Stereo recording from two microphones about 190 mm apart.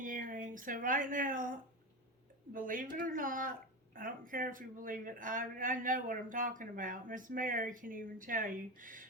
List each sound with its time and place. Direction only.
0.0 s speech: 45° right (ahead or behind)